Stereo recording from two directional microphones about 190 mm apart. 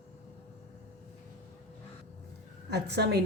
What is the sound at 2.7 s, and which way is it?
Speech, 60° right (ahead or behind).